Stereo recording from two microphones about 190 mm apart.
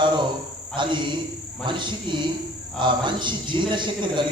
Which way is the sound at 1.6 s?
25° right (ahead or behind).